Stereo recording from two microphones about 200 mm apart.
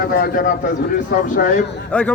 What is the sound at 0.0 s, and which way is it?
A man's voice, 50° left (ahead or behind).